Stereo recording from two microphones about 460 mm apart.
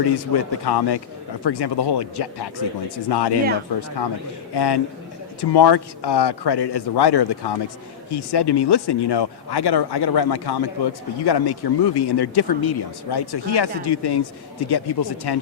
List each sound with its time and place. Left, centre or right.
0.0 s a man's voice: left